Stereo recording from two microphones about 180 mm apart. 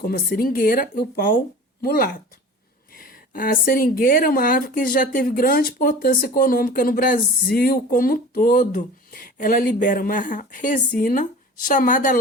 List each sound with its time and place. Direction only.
0.0 s a woman's voice: 55° left (ahead or behind)